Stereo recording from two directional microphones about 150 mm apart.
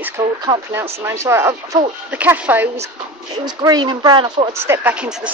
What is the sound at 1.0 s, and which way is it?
Speech, 20° right (ahead or behind).